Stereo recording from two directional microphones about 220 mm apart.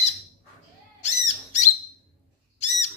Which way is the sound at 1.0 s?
35° left (ahead or behind).